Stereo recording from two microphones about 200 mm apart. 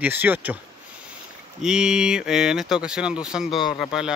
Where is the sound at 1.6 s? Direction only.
5° right (ahead or behind).